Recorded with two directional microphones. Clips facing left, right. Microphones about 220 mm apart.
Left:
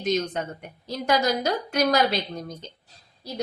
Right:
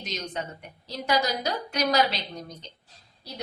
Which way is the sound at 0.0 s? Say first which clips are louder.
Left 9 dB; 50° left (ahead or behind).